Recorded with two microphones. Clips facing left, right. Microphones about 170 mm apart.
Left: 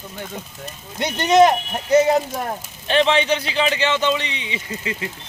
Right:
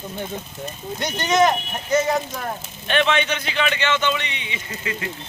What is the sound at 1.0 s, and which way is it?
Speech, 30° left (ahead or behind).